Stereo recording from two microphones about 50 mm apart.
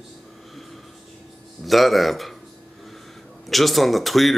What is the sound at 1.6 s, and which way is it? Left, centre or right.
Speech, centre.